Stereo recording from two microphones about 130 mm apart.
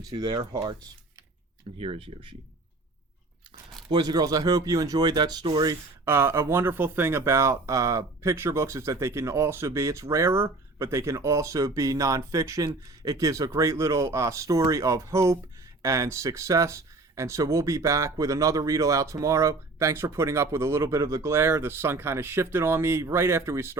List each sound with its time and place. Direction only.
0.0 s speech: 30° right (ahead or behind)
1.8 s speech: 45° right (ahead or behind)
3.8 s speech: 35° right (ahead or behind)
6.1 s speech: 20° right (ahead or behind)